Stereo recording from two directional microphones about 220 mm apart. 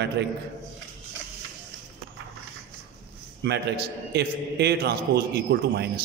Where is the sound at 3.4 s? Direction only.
50° right (ahead or behind).